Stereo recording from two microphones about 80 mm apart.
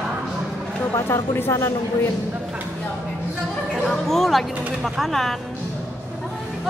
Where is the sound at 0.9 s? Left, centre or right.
Left.